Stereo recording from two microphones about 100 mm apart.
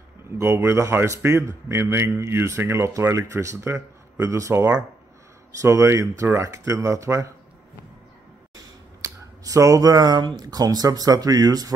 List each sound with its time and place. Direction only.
0.4 s a man's voice: 25° right (ahead or behind)
8.5 s speech: 35° right (ahead or behind)